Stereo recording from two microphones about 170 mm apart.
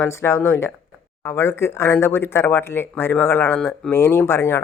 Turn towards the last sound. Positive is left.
turn(degrees=15)  # may be behind; listen again after turning